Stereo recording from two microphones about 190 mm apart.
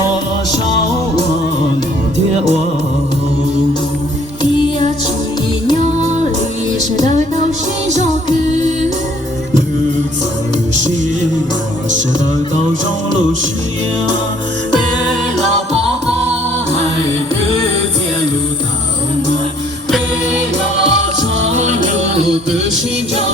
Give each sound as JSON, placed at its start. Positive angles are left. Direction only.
{"t": 6.7, "sound": "music", "side_deg": 20}
{"t": 20.8, "sound": "music", "side_deg": -75}